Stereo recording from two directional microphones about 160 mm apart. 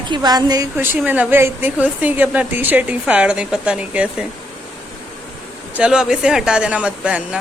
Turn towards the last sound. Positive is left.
turn(degrees=-5)  # may be behind; listen again after turning